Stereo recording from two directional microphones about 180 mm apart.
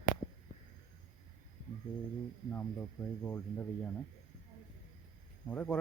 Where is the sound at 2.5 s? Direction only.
15° left (ahead or behind).